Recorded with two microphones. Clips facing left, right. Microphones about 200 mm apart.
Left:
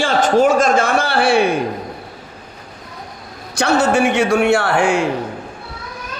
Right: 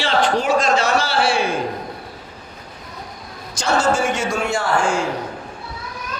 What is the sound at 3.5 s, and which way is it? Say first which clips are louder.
A man's voice: left 4 dB; 65° left (ahead or behind).